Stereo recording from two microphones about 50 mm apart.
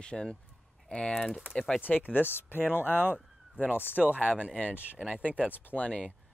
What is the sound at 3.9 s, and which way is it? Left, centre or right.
Speech, right.